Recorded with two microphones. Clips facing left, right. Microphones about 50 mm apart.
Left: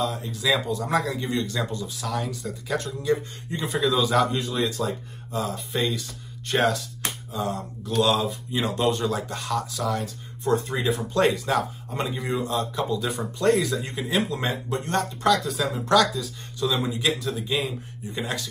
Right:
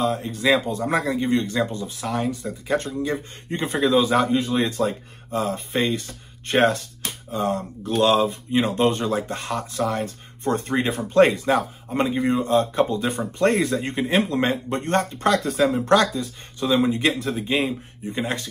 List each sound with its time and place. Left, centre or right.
0.0 s speech: right
3.4 s speech: right
11.0 s speech: right